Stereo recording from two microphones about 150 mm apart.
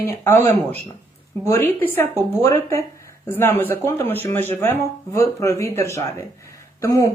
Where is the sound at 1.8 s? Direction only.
15° left (ahead or behind).